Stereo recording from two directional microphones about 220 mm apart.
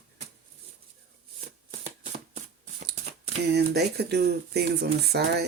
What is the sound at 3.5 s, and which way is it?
Speech, 50° right (ahead or behind).